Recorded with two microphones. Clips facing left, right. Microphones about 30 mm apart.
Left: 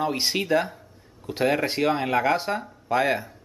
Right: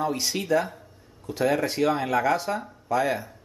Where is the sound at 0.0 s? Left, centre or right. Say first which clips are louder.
Left 2 dB; left.